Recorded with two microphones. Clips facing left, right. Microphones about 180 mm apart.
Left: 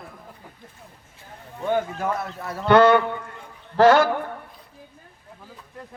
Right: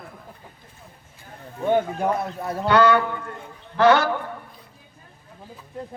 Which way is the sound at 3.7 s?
45° left (ahead or behind).